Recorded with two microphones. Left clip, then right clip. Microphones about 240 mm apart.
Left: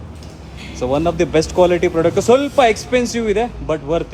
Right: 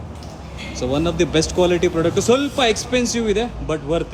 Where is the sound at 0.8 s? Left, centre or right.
Centre.